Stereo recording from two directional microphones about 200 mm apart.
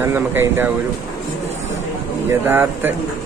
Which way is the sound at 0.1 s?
10° right (ahead or behind).